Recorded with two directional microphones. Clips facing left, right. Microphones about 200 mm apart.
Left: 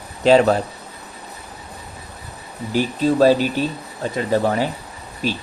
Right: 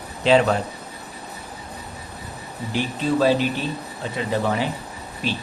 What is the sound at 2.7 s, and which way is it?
Speech, 40° left (ahead or behind).